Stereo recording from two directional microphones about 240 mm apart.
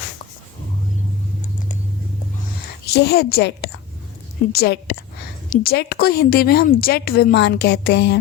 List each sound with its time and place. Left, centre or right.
2.8 s a woman's voice: left